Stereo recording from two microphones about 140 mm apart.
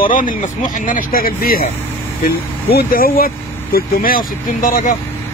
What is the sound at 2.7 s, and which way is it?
Speech, 90° left.